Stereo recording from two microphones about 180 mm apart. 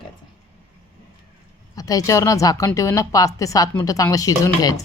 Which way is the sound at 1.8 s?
20° left (ahead or behind).